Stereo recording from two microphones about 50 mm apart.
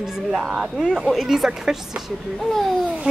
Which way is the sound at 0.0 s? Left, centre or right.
Centre.